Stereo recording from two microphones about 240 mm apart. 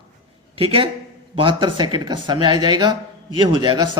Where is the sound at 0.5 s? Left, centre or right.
Right.